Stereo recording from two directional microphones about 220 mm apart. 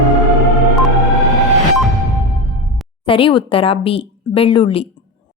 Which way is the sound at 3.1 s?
25° left (ahead or behind).